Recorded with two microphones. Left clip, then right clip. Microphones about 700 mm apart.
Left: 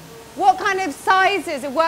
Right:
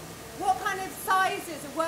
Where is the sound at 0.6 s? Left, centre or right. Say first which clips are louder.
Left 11 dB; left.